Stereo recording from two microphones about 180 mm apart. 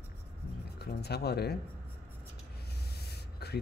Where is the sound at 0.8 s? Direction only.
65° left (ahead or behind).